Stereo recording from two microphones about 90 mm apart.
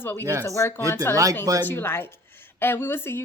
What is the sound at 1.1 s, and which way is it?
Speech, 40° right (ahead or behind).